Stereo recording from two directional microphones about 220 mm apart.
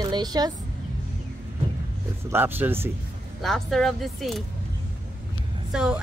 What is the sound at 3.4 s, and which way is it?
Speech, centre (ahead or behind).